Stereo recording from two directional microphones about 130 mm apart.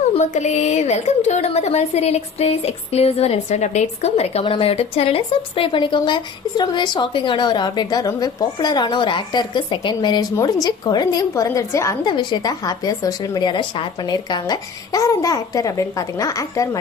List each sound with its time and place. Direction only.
0.1 s a woman's voice: 60° left (ahead or behind); by 11.9 s 25° left (ahead or behind)
12.0 s a woman's voice: 35° left (ahead or behind)